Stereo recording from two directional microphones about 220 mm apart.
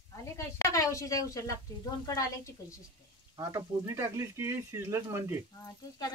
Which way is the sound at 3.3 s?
15° right (ahead or behind).